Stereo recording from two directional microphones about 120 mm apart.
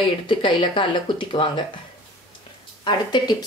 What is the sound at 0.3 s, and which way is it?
Speech, 45° left (ahead or behind).